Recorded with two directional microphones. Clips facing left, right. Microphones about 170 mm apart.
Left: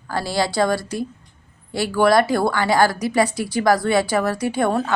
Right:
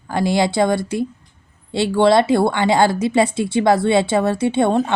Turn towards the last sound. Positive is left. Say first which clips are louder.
# right 4 dB
turn(degrees=-25)  # may be behind; listen again after turning